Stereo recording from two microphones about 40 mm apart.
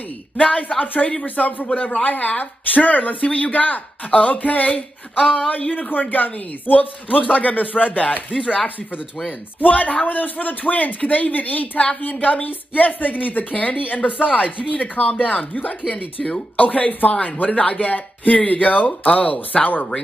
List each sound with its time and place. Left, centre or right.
0.4 s speech: left
1.2 s speech: left